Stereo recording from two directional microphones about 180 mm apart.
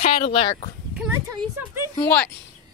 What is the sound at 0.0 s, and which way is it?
Speech, 30° left (ahead or behind).